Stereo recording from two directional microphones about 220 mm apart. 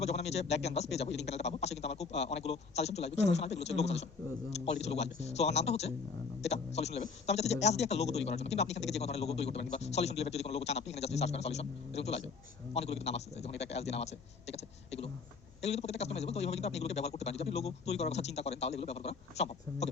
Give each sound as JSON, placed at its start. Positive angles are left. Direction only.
{"t": 0.0, "sound": "speech", "side_deg": 30}